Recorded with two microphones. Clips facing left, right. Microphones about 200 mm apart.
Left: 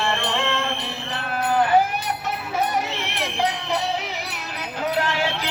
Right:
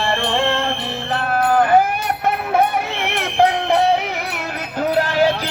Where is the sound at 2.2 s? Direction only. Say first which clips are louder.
Right 11 dB; 55° right (ahead or behind).